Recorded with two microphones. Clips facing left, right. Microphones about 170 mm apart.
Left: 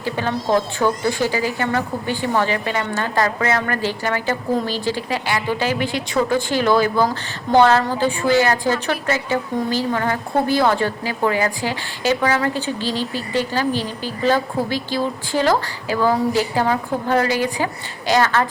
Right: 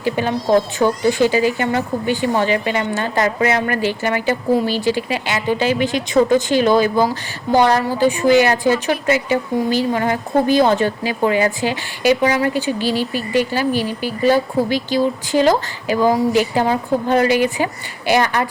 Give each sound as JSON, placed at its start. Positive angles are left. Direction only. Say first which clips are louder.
{"t": 0.0, "sound": "speech", "louder": "right 3 dB", "side_deg": -15}